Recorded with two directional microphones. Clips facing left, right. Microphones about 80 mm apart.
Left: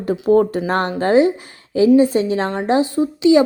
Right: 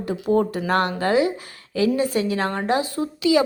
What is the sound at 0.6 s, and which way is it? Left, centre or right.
A woman's voice, left.